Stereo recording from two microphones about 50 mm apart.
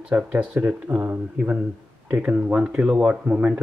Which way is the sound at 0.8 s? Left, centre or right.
Right.